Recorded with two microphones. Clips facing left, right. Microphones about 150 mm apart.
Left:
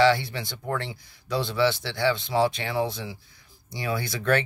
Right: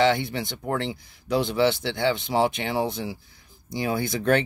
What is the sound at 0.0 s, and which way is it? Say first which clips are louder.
Speech: even; 20° right (ahead or behind).